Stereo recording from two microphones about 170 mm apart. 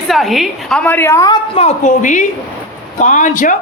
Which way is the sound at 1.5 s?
40° left (ahead or behind).